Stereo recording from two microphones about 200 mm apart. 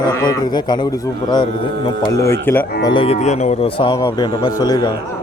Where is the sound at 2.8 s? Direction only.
25° left (ahead or behind).